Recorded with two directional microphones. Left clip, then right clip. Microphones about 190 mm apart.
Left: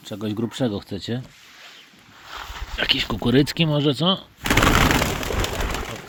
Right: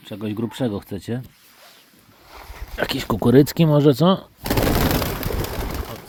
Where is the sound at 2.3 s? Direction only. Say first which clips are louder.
Left 6 dB; centre (ahead or behind).